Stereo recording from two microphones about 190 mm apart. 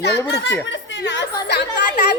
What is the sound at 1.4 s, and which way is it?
Chatter, 65° left (ahead or behind).